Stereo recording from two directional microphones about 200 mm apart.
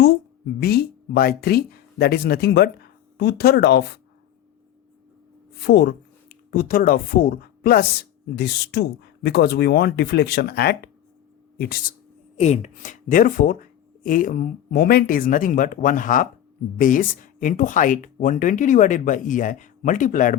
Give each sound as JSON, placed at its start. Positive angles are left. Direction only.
{"t": 0.6, "sound": "speech", "side_deg": 50}
{"t": 5.6, "sound": "speech", "side_deg": 55}
{"t": 12.4, "sound": "speech", "side_deg": 35}